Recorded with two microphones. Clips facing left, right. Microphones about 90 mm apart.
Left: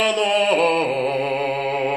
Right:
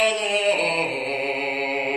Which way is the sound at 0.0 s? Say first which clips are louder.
Left 3 dB; 50° left (ahead or behind).